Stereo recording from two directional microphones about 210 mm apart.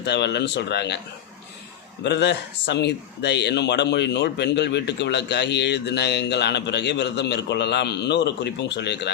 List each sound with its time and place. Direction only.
0.0 s speech: 55° left (ahead or behind)
2.0 s speech: 55° left (ahead or behind)